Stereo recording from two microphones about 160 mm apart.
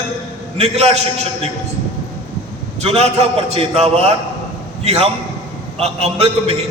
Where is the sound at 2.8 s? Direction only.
40° right (ahead or behind).